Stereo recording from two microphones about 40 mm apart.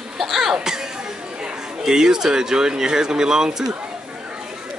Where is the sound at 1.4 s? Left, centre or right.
Centre.